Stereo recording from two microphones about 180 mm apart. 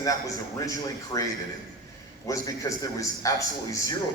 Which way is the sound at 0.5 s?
20° left (ahead or behind).